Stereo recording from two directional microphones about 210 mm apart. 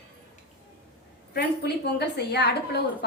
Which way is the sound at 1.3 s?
50° left (ahead or behind).